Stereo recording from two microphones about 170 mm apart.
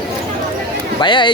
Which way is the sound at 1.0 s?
30° left (ahead or behind).